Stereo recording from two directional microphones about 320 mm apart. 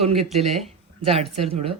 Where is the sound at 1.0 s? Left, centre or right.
Centre.